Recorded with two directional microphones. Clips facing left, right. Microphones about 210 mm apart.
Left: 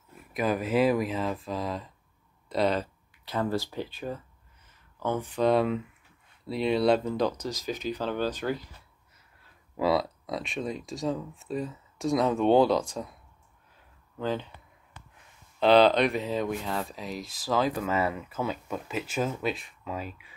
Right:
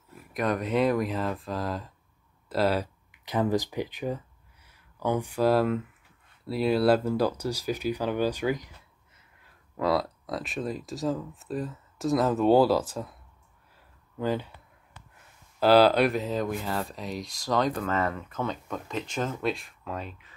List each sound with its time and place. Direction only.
0.3 s speech: 5° left (ahead or behind)
3.1 s speech: 15° right (ahead or behind)
9.8 s speech: centre (ahead or behind)
14.2 s speech: 10° right (ahead or behind)
15.6 s speech: 5° right (ahead or behind)